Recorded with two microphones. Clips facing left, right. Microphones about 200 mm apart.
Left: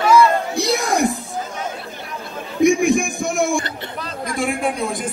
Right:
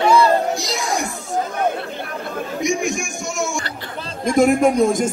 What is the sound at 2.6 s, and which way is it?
Music, 55° left (ahead or behind).